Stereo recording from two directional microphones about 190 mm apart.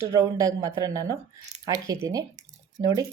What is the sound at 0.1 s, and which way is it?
A woman's voice, 20° right (ahead or behind).